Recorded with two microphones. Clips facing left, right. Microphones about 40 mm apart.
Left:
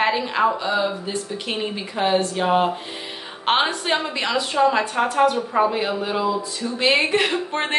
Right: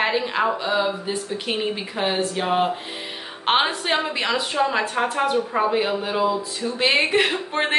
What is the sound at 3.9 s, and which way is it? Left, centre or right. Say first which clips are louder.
Speech: even; centre.